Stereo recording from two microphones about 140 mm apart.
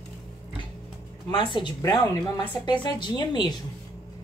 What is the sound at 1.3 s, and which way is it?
Speech, 35° left (ahead or behind).